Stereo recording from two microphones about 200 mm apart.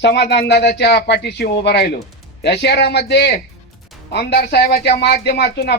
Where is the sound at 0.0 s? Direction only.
55° left (ahead or behind).